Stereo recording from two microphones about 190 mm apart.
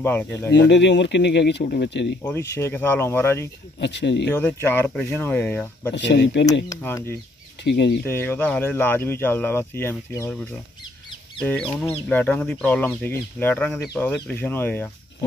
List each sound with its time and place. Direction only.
0.0 s speech: 10° left (ahead or behind)
0.5 s speech: 70° left (ahead or behind)
2.2 s speech: 15° left (ahead or behind)
3.8 s speech: 70° left (ahead or behind)
4.3 s speech: 10° left (ahead or behind)
5.9 s speech: 65° left (ahead or behind)
6.7 s speech: 15° left (ahead or behind)
7.6 s speech: 65° left (ahead or behind)
8.1 s speech: 10° left (ahead or behind)
12.1 s speech: 10° left (ahead or behind)